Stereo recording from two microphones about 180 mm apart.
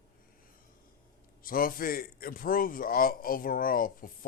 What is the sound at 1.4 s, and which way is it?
A man's voice, 55° left (ahead or behind).